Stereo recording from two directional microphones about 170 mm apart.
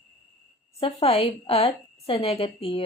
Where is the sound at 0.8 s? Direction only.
35° left (ahead or behind).